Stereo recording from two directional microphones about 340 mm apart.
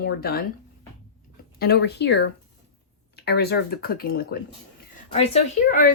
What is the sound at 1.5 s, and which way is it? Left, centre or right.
A woman's voice, left.